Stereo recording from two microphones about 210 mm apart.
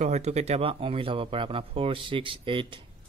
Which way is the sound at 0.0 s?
30° right (ahead or behind).